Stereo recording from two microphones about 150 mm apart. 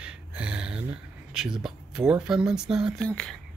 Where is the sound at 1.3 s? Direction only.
5° right (ahead or behind).